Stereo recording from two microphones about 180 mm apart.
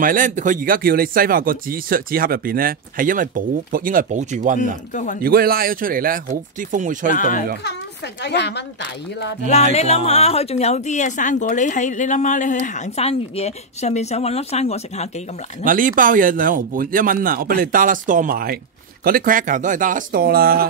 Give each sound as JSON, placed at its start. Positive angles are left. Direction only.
{"t": 0.0, "sound": "speech", "side_deg": -50}
{"t": 4.6, "sound": "speech", "side_deg": 45}
{"t": 5.2, "sound": "speech", "side_deg": -55}
{"t": 7.2, "sound": "speech", "side_deg": 45}
{"t": 8.2, "sound": "speech", "side_deg": 70}
{"t": 9.5, "sound": "a woman's voice", "side_deg": 40}
{"t": 15.6, "sound": "speech", "side_deg": -50}